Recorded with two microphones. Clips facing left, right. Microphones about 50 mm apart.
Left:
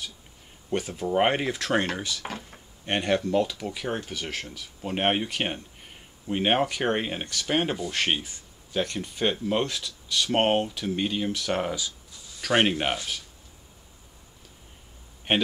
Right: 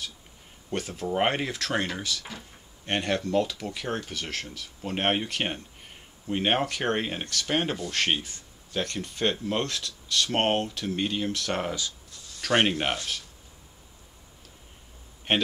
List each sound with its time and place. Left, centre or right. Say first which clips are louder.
0.7 s speech: left 3 dB; centre
15.3 s speech: left 1 dB; centre